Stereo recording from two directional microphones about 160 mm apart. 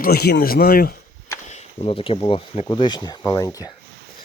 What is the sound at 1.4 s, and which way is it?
Speech, 45° left (ahead or behind).